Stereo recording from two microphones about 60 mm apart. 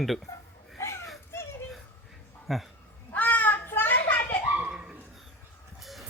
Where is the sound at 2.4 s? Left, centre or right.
Centre.